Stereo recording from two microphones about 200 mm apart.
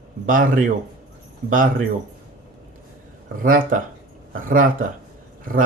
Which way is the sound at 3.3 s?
45° right (ahead or behind).